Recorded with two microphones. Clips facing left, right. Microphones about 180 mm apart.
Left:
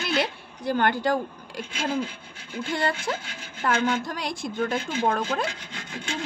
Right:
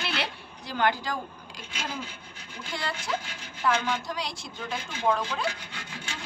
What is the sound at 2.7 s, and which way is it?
A woman's voice, 50° left (ahead or behind).